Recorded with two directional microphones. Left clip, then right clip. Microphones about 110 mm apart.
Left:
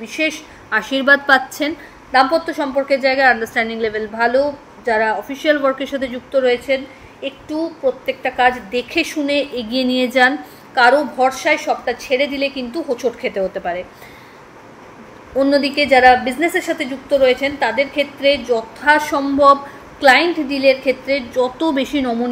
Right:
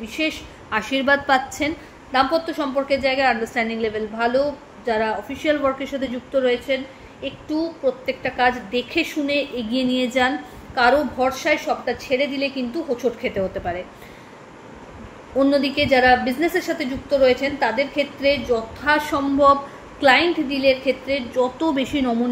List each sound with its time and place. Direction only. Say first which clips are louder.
0.1 s a woman's voice: left 5 dB; 35° left (ahead or behind)
1.0 s a woman's voice: left 6 dB; 55° left (ahead or behind)
2.1 s a woman's voice: left 5 dB; 35° left (ahead or behind)
15.3 s a woman's voice: left 3 dB; 35° left (ahead or behind)